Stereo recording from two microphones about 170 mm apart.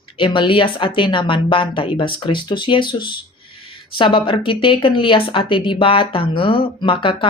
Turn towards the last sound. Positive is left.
turn(degrees=30)  # may be behind; listen again after turning